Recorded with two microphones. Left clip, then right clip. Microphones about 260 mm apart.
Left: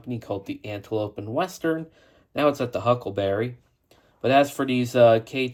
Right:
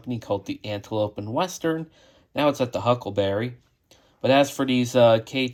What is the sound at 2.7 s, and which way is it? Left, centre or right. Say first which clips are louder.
Speech: even; centre.